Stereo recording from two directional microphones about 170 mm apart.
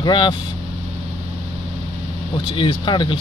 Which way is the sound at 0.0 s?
25° left (ahead or behind).